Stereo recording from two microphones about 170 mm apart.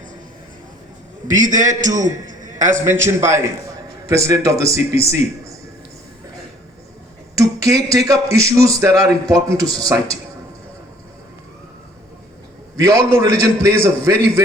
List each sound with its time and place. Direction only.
1.4 s a man's voice: 50° right (ahead or behind)
2.2 s a sound: 50° right (ahead or behind)
2.8 s a man's voice: 15° right (ahead or behind)
7.3 s a man's voice: 20° right (ahead or behind)
12.7 s a man's voice: 20° right (ahead or behind)